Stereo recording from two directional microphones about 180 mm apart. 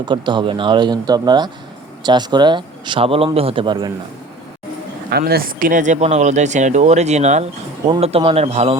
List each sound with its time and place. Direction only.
0.0 s a man's voice: 25° right (ahead or behind)
5.0 s speech: 60° right (ahead or behind); by 8.8 s 35° right (ahead or behind)